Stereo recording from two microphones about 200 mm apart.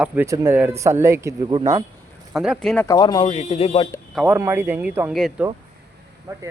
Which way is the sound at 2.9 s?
20° left (ahead or behind).